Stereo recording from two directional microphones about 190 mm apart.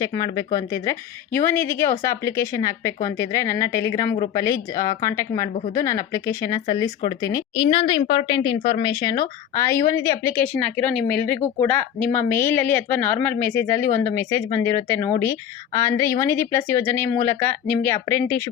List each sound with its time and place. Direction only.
0.0 s speech: 20° left (ahead or behind)